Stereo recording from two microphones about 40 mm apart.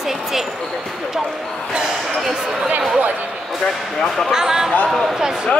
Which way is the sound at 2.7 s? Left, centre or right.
Right.